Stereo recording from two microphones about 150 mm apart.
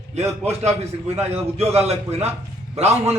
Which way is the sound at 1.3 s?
45° right (ahead or behind).